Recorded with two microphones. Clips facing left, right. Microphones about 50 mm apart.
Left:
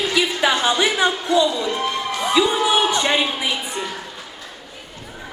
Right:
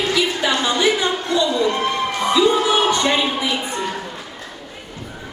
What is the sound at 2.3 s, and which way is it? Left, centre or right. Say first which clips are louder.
Music: right 1 dB; left.